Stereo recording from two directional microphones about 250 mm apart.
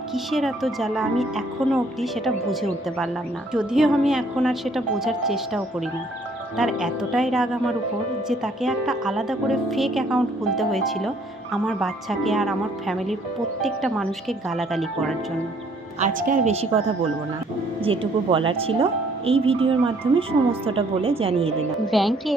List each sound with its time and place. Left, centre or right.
0.1 s speech: centre
16.0 s speech: right
17.8 s speech: right
21.8 s speech: centre